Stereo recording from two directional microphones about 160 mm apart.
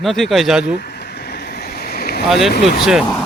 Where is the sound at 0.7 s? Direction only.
85° left.